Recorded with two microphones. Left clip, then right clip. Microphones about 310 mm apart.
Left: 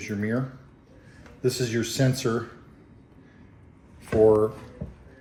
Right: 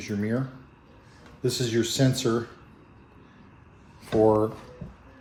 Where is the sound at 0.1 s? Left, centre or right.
Centre.